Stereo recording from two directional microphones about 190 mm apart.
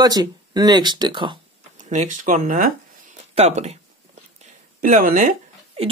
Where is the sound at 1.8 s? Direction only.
40° right (ahead or behind).